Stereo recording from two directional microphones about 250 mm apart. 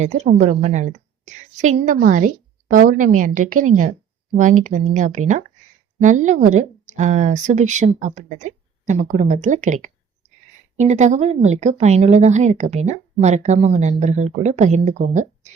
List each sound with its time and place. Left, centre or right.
0.0 s a woman's voice: right